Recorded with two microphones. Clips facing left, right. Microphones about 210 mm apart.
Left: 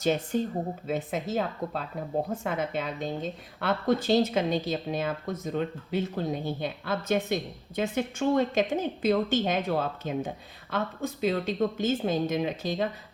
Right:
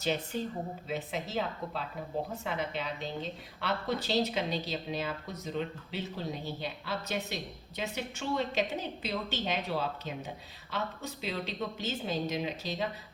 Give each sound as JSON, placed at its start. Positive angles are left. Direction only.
{"t": 0.0, "sound": "a woman's voice", "side_deg": 50}